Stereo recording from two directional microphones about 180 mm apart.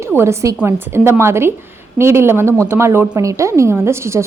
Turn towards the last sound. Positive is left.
turn(degrees=-15)  # may be behind; listen again after turning